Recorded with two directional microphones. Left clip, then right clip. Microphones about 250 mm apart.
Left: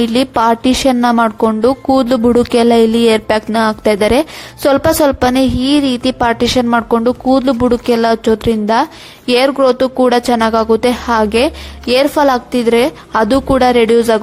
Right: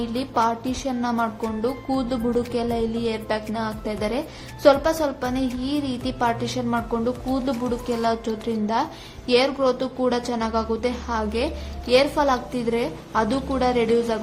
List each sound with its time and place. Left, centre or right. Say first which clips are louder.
0.0 s a woman's voice: left 11 dB; left